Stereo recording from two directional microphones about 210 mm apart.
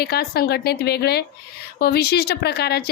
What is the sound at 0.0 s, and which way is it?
Speech, 50° left (ahead or behind).